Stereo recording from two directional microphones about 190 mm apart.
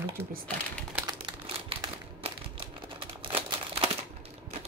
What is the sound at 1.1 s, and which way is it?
Typewriter, 25° right (ahead or behind).